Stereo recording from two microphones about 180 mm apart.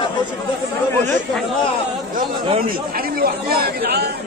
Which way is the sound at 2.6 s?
55° right (ahead or behind).